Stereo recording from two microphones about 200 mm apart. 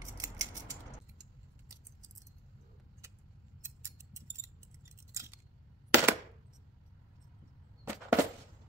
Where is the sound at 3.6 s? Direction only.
15° right (ahead or behind).